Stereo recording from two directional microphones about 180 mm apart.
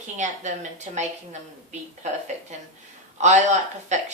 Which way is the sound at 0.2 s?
40° right (ahead or behind).